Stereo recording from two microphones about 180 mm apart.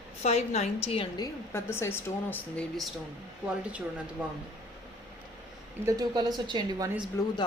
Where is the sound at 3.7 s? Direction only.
5° right (ahead or behind).